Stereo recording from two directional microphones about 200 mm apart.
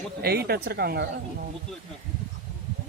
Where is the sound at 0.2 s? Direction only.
50° right (ahead or behind).